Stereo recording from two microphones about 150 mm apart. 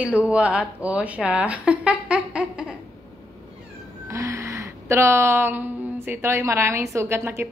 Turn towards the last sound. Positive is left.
turn(degrees=-15)  # may be behind; listen again after turning